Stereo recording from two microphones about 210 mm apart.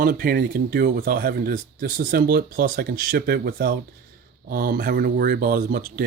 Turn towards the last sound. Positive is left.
turn(degrees=-40)  # may be behind; listen again after turning